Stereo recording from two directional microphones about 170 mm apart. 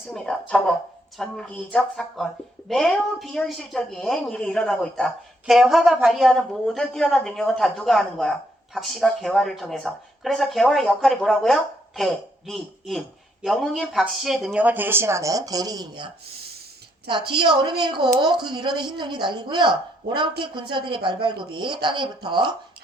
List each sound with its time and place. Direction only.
0.1 s speech: 5° left (ahead or behind); by 16.0 s 25° right (ahead or behind)
16.2 s a sound: 70° right (ahead or behind)
17.1 s speech: 30° right (ahead or behind)